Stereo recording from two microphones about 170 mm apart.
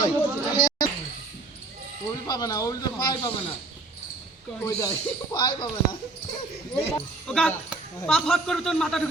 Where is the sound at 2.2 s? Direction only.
25° left (ahead or behind).